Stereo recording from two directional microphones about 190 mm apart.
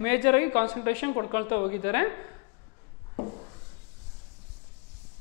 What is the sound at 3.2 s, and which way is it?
Rub, 30° left (ahead or behind).